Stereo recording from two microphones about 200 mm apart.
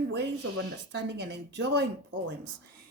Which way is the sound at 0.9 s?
60° right (ahead or behind).